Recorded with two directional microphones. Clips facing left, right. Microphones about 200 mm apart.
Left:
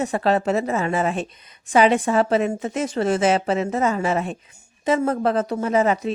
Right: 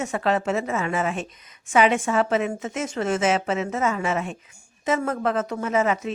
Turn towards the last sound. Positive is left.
turn(degrees=35)  # may be behind; listen again after turning